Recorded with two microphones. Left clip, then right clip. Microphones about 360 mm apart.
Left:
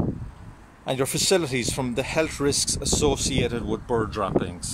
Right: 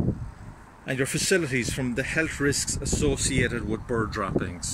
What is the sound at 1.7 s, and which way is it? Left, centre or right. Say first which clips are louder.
Speech: left 2 dB; centre.